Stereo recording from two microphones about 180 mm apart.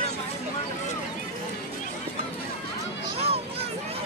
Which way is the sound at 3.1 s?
35° right (ahead or behind).